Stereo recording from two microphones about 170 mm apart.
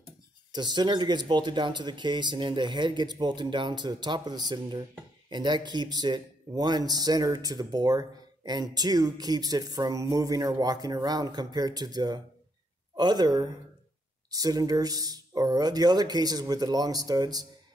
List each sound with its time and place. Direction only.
0.5 s speech: 25° right (ahead or behind)